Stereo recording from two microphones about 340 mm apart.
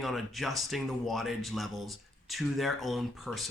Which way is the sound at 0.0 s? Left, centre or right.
Centre.